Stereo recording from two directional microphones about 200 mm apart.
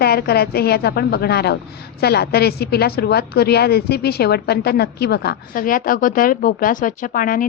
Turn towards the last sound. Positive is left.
turn(degrees=45)  # may be behind; listen again after turning